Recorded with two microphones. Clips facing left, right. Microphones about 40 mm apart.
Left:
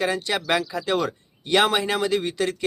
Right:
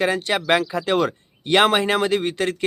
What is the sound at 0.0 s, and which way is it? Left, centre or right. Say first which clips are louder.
Speech: right 3 dB; right.